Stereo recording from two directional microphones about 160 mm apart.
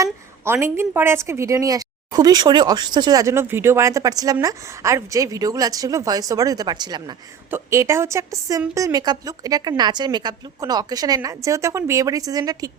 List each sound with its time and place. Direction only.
0.0 s a woman's voice: 15° right (ahead or behind)